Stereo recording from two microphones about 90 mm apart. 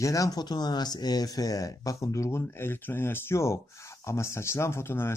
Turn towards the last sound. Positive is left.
turn(degrees=25)  # may be behind; listen again after turning